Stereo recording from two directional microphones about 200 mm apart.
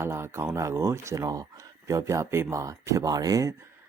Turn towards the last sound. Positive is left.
turn(degrees=-15)  # may be behind; listen again after turning